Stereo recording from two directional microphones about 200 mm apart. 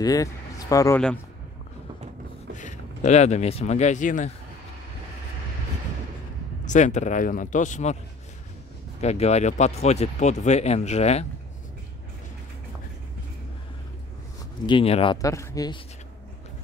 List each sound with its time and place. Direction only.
0.0 s speech: 15° left (ahead or behind)
2.5 s speech: 40° left (ahead or behind)
6.6 s speech: 35° left (ahead or behind)
9.0 s speech: 35° left (ahead or behind)
14.7 s speech: 25° left (ahead or behind)
15.2 s speech: 15° left (ahead or behind)